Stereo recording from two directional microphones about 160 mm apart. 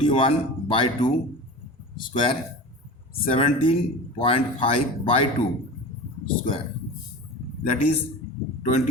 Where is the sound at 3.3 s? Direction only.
35° left (ahead or behind).